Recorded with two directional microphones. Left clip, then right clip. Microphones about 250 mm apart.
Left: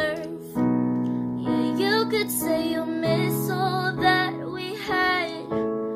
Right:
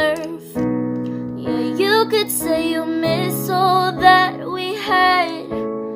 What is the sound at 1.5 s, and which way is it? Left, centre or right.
Music, centre.